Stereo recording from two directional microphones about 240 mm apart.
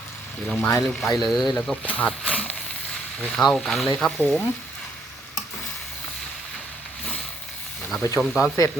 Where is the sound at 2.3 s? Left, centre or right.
Centre.